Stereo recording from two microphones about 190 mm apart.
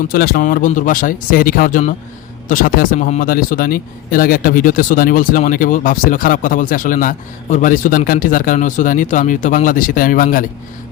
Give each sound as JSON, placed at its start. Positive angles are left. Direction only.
{"t": 0.1, "sound": "speech", "side_deg": 50}